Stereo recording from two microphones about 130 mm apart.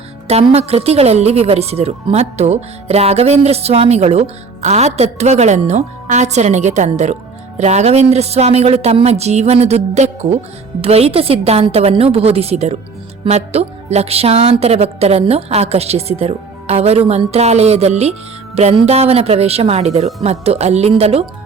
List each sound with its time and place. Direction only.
0.3 s a woman's voice: 55° right (ahead or behind)